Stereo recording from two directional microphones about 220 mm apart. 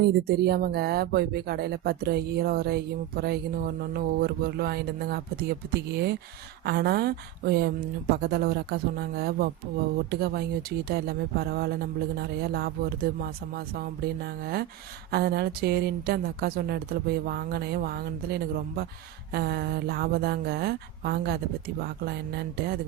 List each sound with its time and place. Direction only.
0.0 s speech: 45° right (ahead or behind)